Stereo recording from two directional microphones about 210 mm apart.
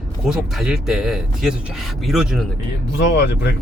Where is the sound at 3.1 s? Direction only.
55° left (ahead or behind).